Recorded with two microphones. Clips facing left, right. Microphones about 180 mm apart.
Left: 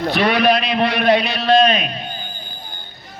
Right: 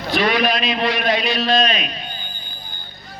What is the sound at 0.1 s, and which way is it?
A man's voice, 60° left (ahead or behind).